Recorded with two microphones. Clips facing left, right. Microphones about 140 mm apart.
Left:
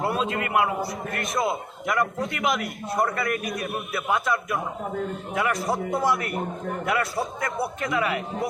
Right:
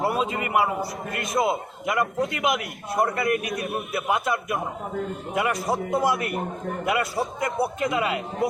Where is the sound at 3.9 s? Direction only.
20° right (ahead or behind).